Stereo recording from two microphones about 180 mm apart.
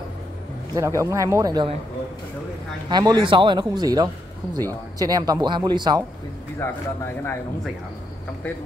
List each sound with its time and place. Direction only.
0.7 s a man's voice: 15° right (ahead or behind)
2.9 s a man's voice: 20° right (ahead or behind)
6.6 s speech: 10° left (ahead or behind)